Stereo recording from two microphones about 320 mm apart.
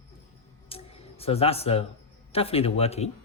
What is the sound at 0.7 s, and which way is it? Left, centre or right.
Music, centre.